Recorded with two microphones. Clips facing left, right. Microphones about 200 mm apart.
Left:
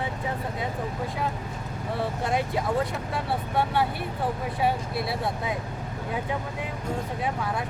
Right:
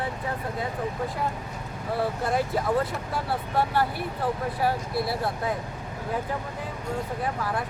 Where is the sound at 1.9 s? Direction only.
Centre (ahead or behind).